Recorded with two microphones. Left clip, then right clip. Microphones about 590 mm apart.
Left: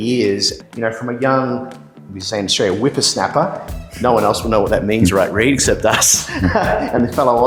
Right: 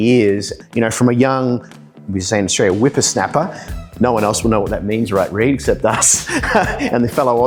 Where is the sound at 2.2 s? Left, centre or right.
Right.